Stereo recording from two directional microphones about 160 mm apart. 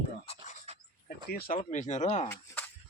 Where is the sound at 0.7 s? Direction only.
45° right (ahead or behind).